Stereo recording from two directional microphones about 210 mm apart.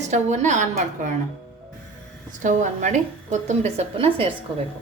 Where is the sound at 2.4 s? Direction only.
35° right (ahead or behind).